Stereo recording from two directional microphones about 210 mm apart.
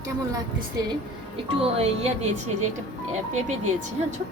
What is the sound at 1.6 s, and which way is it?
A woman's voice, 30° right (ahead or behind).